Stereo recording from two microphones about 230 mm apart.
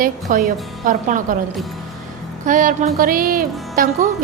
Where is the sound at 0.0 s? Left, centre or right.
Right.